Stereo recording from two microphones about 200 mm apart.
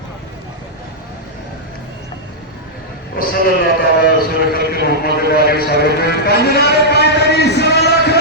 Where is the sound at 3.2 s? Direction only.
45° left (ahead or behind).